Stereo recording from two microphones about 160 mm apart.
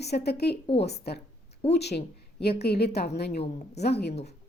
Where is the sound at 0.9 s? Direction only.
90° left.